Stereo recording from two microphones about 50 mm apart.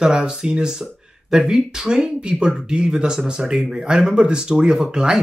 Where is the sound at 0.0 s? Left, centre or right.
Centre.